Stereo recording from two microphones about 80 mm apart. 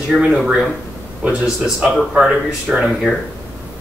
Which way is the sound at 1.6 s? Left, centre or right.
Centre.